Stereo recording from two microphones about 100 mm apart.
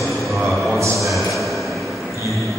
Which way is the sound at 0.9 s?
Centre (ahead or behind).